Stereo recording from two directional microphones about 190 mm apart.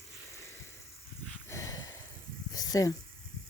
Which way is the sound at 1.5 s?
15° left (ahead or behind).